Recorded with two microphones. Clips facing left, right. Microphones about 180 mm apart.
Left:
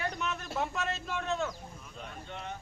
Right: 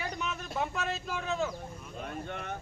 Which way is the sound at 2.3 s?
55° right (ahead or behind).